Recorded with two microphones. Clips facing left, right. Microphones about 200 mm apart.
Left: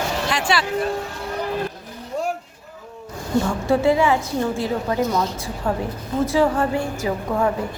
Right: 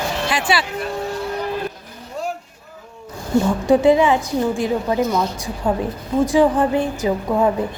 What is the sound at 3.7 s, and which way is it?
A woman's voice, 15° right (ahead or behind).